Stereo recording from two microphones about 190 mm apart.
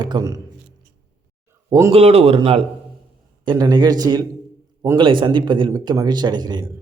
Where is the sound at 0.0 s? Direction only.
20° right (ahead or behind).